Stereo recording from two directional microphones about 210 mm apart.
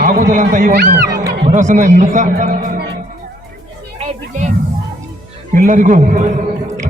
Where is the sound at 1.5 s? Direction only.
35° right (ahead or behind).